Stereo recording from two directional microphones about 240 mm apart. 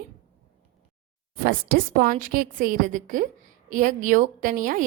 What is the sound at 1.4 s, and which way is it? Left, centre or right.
A woman's voice, right.